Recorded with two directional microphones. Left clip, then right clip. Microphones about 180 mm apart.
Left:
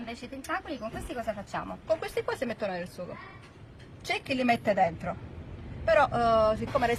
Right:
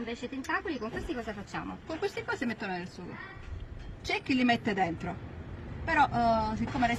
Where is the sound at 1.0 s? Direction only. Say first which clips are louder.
Left 2 dB; 35° left (ahead or behind).